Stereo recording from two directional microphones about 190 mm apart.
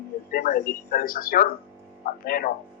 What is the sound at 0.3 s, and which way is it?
Speech, 50° left (ahead or behind).